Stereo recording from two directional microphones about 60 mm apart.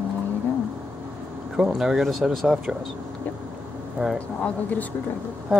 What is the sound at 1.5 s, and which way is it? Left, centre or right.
Speech, centre.